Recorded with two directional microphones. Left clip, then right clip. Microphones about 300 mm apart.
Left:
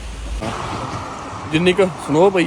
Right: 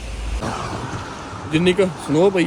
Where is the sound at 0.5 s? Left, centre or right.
Centre.